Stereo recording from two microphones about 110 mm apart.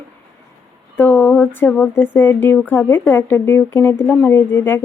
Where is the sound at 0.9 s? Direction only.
15° left (ahead or behind).